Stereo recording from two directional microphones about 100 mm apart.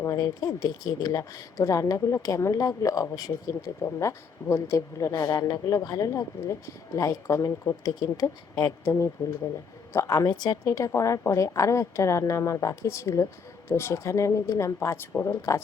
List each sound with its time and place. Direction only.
0.0 s speech: 35° left (ahead or behind)
8.8 s speech: 30° left (ahead or behind)